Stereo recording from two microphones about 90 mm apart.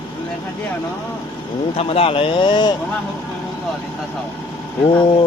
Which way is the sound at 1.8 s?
90° left.